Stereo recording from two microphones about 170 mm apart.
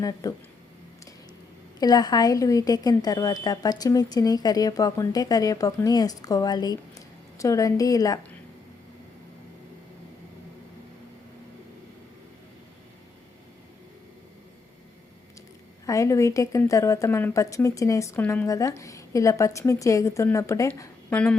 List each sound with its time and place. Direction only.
0.0 s a woman's voice: 20° left (ahead or behind)
1.8 s a woman's voice: 25° left (ahead or behind)
15.9 s a woman's voice: 20° left (ahead or behind)